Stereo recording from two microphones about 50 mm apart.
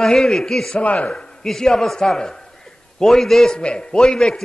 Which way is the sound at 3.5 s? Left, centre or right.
Centre.